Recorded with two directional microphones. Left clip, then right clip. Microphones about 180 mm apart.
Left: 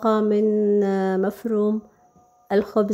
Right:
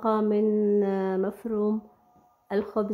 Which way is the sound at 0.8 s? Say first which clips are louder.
Left 4 dB; 25° left (ahead or behind).